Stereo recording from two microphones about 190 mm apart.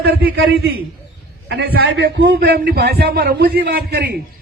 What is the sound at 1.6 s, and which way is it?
A man's voice, 60° right (ahead or behind).